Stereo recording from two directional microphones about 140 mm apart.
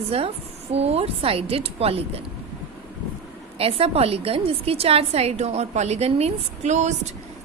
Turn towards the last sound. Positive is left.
turn(degrees=-55)  # may be behind; listen again after turning